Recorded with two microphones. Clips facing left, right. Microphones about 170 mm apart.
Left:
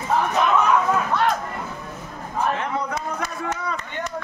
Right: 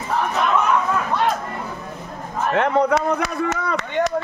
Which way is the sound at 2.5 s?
75° right (ahead or behind).